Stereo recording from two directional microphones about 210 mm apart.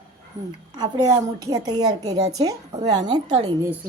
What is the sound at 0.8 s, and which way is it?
A woman's voice, 20° right (ahead or behind).